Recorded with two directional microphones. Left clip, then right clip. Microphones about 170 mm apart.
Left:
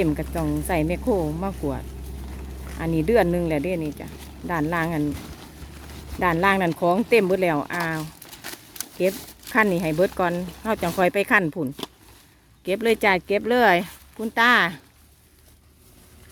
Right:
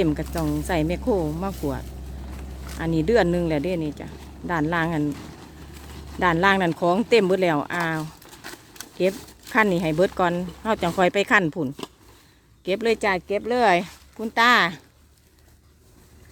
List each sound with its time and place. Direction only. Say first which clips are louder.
0.0 s speech: even; centre (ahead or behind)
5.1 s a sound: left 1 dB; 15° left (ahead or behind)
6.1 s speech: right 1 dB; centre (ahead or behind)
8.4 s a sound: left 2 dB; 10° left (ahead or behind)
9.0 s speech: even; centre (ahead or behind)
13.0 s speech: left 3 dB; 15° left (ahead or behind)
13.7 s speech: left 1 dB; 5° left (ahead or behind)